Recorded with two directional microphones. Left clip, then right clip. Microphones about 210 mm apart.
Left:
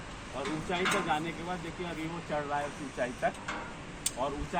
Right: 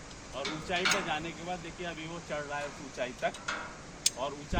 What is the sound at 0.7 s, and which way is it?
Speech, 40° right (ahead or behind).